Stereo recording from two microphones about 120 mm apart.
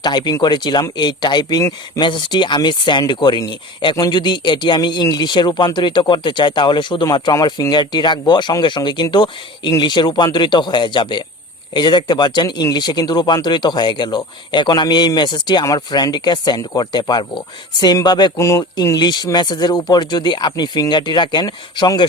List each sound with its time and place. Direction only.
0.0 s speech: 35° left (ahead or behind)